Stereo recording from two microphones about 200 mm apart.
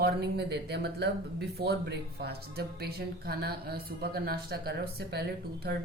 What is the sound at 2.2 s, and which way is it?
Speech, 55° right (ahead or behind).